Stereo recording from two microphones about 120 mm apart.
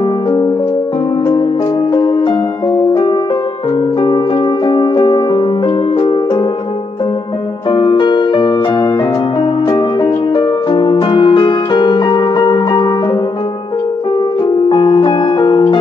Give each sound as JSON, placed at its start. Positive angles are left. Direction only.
{"t": 1.9, "sound": "music", "side_deg": 40}
{"t": 7.7, "sound": "music", "side_deg": 45}
{"t": 14.4, "sound": "piano", "side_deg": 40}